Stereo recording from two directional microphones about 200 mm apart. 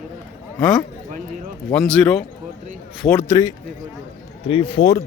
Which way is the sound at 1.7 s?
5° left (ahead or behind).